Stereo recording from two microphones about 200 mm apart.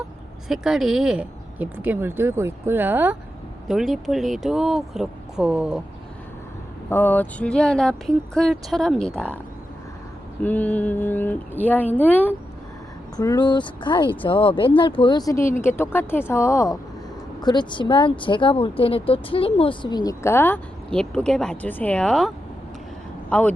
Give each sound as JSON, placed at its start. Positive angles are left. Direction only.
{"t": 0.4, "sound": "speech", "side_deg": 0}
{"t": 6.9, "sound": "speech", "side_deg": 10}
{"t": 10.4, "sound": "speech", "side_deg": 10}
{"t": 13.1, "sound": "speech", "side_deg": 20}
{"t": 23.3, "sound": "speech", "side_deg": 5}